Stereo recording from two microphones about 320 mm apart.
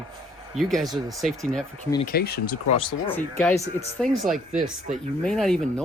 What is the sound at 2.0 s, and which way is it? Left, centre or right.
Speech, left.